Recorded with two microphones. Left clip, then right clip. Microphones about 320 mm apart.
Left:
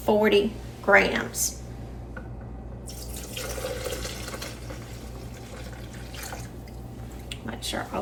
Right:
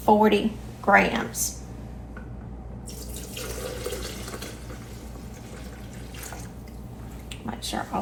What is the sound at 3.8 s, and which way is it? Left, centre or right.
Water, centre.